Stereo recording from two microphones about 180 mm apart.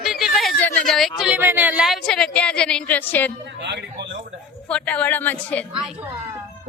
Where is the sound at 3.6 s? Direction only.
70° right (ahead or behind).